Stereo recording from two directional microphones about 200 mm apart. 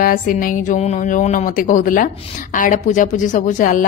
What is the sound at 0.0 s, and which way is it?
A woman's voice, 45° left (ahead or behind).